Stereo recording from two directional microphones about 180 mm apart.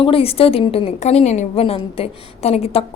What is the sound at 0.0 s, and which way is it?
A woman's voice, 30° left (ahead or behind).